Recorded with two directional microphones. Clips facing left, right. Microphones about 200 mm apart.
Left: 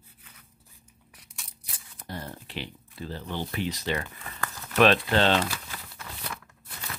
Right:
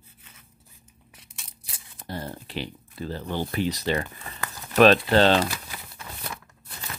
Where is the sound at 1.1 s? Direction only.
25° right (ahead or behind).